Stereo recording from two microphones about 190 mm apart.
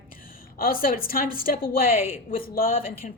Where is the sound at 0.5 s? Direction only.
50° left (ahead or behind).